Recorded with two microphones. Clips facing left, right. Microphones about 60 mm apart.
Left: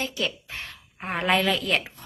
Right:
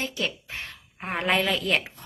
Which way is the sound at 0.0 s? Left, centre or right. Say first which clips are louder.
Left 1 dB; right.